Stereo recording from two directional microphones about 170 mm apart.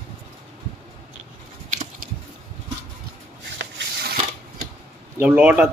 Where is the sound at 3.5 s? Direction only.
70° right (ahead or behind).